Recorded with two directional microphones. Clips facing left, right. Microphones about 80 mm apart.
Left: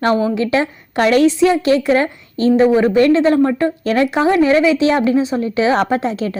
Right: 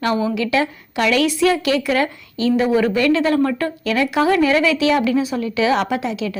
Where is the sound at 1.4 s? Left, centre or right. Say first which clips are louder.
Left 4 dB; left.